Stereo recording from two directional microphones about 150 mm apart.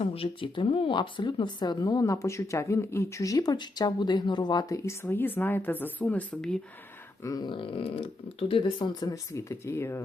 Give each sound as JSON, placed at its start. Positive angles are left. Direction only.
{"t": 0.0, "sound": "speech", "side_deg": 40}
{"t": 7.3, "sound": "speech", "side_deg": 30}